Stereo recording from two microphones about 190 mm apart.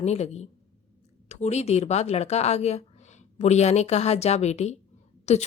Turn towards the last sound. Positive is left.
turn(degrees=35)  # may be behind; listen again after turning